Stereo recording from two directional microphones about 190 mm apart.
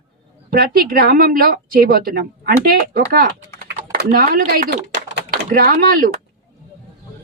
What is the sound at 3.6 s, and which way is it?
Typing, 60° right (ahead or behind).